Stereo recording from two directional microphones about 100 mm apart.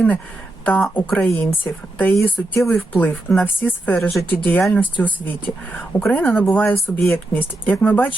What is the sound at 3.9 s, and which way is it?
Speech, 5° left (ahead or behind).